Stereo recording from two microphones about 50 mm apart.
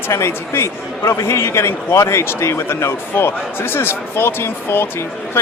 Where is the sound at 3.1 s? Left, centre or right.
Left.